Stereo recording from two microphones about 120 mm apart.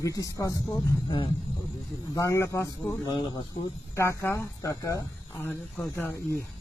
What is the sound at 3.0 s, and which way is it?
Speech, 40° left (ahead or behind).